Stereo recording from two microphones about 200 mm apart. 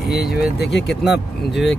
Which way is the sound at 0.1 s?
Centre (ahead or behind).